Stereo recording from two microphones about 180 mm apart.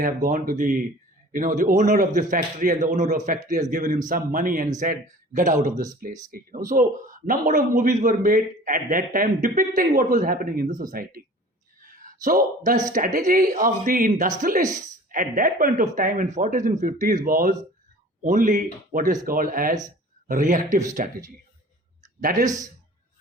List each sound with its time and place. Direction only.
0.0 s a man's voice: 50° right (ahead or behind)
22.2 s a man's voice: 50° right (ahead or behind)
22.4 s a man's voice: 20° right (ahead or behind)